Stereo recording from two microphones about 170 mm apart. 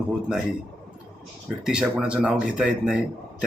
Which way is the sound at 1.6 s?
5° right (ahead or behind).